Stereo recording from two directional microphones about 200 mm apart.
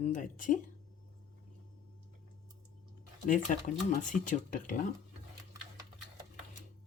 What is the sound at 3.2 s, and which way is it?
Speech, 40° left (ahead or behind).